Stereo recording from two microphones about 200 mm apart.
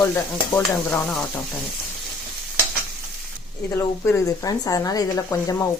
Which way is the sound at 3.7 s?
15° left (ahead or behind).